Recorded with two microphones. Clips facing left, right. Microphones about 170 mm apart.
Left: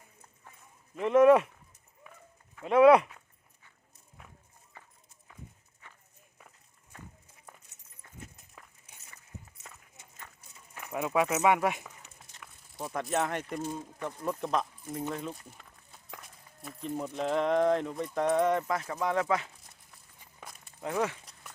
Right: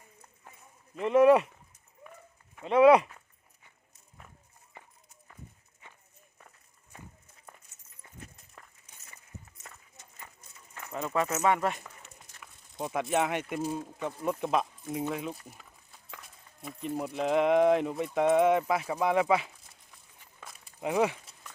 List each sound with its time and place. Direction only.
0.9 s speech: centre (ahead or behind)
2.6 s speech: centre (ahead or behind)
4.7 s clip-clop: 20° right (ahead or behind)
5.8 s walk: 20° right (ahead or behind)
6.9 s run: 15° right (ahead or behind)
10.8 s a sound: 10° left (ahead or behind)
12.9 s speech: 5° right (ahead or behind)
20.8 s speech: 10° right (ahead or behind)